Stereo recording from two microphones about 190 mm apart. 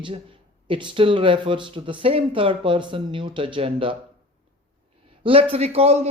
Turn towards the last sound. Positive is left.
turn(degrees=-35)  # may be behind; listen again after turning